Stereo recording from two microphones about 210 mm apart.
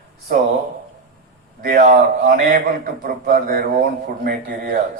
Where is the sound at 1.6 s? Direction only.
40° right (ahead or behind).